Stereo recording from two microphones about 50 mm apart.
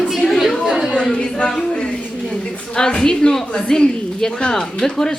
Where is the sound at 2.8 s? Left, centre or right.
Centre.